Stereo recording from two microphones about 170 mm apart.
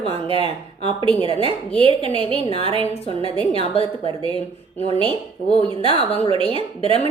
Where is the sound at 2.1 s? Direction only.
35° left (ahead or behind).